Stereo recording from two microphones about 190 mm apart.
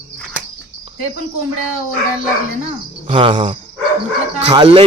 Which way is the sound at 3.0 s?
30° right (ahead or behind).